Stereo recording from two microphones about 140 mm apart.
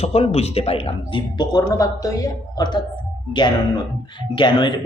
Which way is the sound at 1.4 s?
25° left (ahead or behind).